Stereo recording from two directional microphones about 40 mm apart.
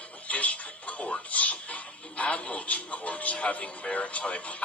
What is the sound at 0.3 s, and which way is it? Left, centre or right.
Speech, left.